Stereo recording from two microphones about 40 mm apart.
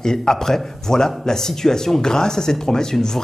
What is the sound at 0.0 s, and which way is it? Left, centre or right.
Speech, centre.